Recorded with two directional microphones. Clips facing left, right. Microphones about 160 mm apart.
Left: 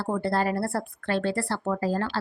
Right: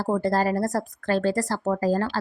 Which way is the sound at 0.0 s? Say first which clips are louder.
Right 3 dB; 40° right (ahead or behind).